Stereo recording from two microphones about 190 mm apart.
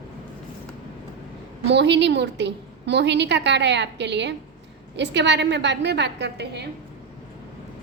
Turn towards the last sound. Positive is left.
turn(degrees=-65)  # may be behind; listen again after turning